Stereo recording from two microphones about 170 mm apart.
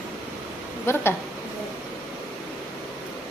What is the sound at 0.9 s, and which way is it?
Speech, 15° left (ahead or behind).